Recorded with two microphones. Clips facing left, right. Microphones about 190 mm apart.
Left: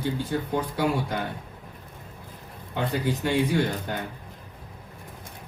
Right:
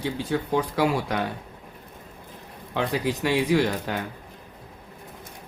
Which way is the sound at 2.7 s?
90° right.